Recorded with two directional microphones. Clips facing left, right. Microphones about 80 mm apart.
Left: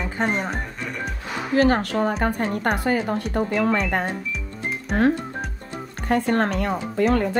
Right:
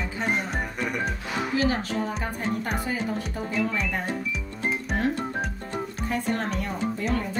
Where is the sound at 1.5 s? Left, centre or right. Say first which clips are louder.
Left 8 dB; left.